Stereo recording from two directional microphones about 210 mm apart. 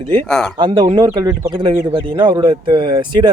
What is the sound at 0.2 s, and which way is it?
Speech, 5° left (ahead or behind).